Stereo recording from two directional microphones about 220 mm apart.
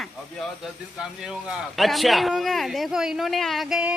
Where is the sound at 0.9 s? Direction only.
5° right (ahead or behind).